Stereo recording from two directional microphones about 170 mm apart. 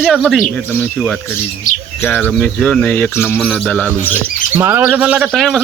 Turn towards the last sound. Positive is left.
turn(degrees=0)  # may be behind; listen again after turning